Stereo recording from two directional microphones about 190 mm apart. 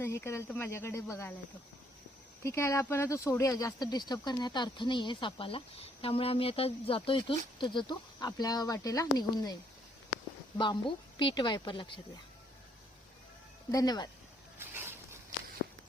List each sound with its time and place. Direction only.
0.0 s speech: 15° left (ahead or behind)
2.4 s speech: 15° left (ahead or behind)
10.6 s speech: 25° left (ahead or behind)
13.7 s speech: 20° left (ahead or behind)
14.6 s a sound: 10° right (ahead or behind)